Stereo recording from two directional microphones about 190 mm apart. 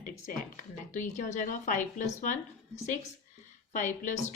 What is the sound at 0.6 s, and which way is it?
A woman's voice, 40° left (ahead or behind).